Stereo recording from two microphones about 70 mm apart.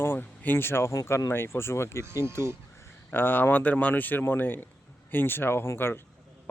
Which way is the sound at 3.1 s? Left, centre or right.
Left.